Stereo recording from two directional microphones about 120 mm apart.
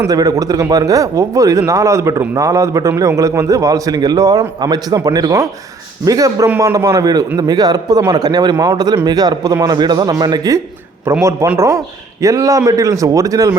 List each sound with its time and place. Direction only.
0.1 s a man's voice: 30° right (ahead or behind)